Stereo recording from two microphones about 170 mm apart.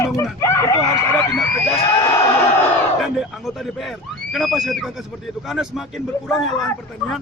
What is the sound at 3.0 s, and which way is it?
A man's voice, centre (ahead or behind).